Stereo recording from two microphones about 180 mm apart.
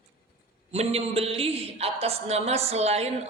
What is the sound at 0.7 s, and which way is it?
A man's voice, 35° right (ahead or behind).